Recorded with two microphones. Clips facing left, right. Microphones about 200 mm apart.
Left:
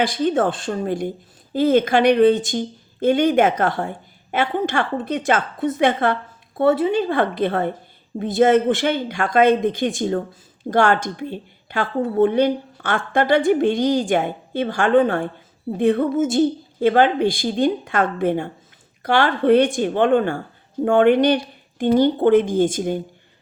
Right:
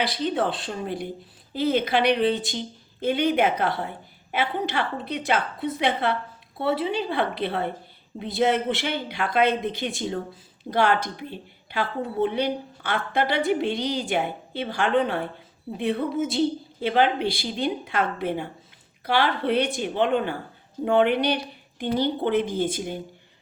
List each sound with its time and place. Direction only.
0.0 s a woman's voice: 45° left (ahead or behind)